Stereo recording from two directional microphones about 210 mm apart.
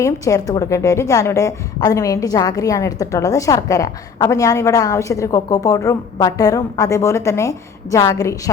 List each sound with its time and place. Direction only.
0.0 s a woman's voice: 15° left (ahead or behind)